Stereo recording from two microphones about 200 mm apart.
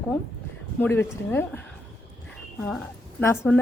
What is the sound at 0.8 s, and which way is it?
Speech, 10° left (ahead or behind).